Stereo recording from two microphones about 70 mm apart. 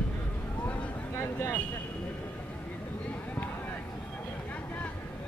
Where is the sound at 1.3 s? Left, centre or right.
Left.